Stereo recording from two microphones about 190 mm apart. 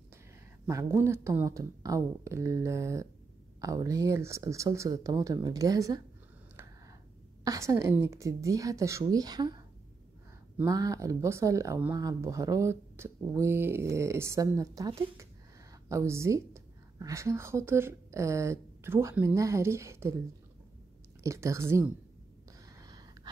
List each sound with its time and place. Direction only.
0.7 s speech: 15° right (ahead or behind)
6.5 s a sound: 15° right (ahead or behind)
7.4 s speech: 15° right (ahead or behind)
10.6 s a woman's voice: 20° right (ahead or behind)
21.2 s speech: 15° right (ahead or behind)
22.8 s gasp: 20° right (ahead or behind)